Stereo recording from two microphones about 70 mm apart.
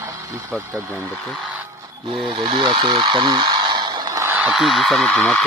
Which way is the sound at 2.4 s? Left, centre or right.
Right.